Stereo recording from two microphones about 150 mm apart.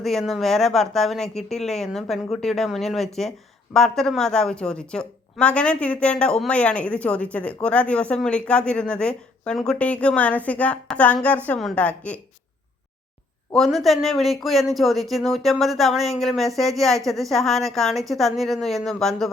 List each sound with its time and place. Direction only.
0.0 s speech: centre (ahead or behind)
13.5 s speech: centre (ahead or behind)